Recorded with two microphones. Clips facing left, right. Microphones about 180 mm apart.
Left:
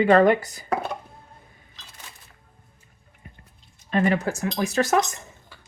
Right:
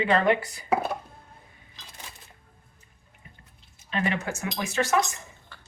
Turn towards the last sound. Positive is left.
turn(degrees=40)  # may be behind; listen again after turning